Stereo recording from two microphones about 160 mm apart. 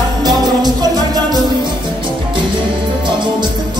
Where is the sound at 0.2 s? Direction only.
25° right (ahead or behind).